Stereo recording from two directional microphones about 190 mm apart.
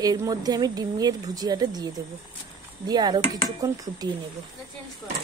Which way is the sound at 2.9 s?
20° right (ahead or behind).